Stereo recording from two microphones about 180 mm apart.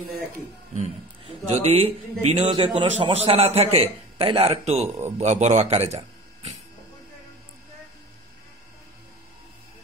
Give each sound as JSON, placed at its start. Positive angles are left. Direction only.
{"t": 1.5, "sound": "a man's voice", "side_deg": -35}
{"t": 4.8, "sound": "a man's voice", "side_deg": -15}
{"t": 5.2, "sound": "speech", "side_deg": -40}